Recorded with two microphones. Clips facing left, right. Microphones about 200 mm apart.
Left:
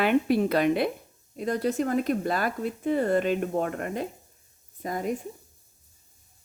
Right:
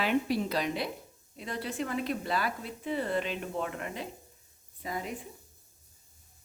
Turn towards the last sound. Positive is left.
turn(degrees=45)  # may be behind; listen again after turning